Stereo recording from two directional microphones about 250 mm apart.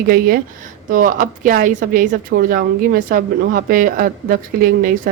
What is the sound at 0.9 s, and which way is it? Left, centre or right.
A woman's voice, right.